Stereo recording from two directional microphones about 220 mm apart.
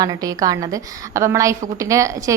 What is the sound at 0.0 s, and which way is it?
A woman's voice, 15° right (ahead or behind).